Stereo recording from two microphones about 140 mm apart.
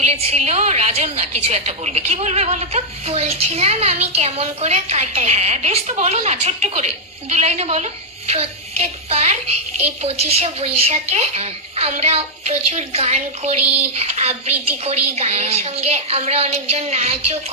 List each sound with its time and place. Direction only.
0.0 s a woman's voice: 50° right (ahead or behind)